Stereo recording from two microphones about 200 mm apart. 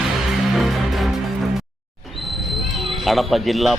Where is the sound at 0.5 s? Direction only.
Centre (ahead or behind).